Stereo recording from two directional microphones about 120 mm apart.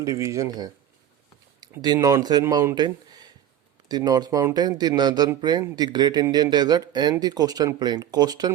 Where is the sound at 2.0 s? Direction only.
30° right (ahead or behind).